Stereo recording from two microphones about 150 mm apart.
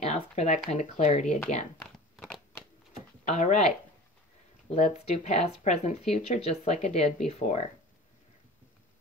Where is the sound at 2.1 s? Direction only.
Centre (ahead or behind).